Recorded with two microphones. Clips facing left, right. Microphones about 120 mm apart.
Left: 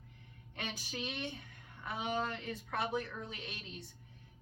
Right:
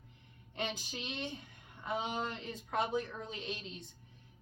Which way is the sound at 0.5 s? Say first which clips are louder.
Right 3 dB; 20° right (ahead or behind).